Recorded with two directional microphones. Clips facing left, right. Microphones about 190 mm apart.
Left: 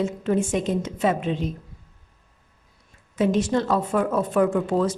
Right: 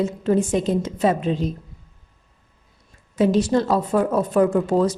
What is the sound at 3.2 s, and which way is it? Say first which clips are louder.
A woman's voice: right 3 dB; 35° right (ahead or behind).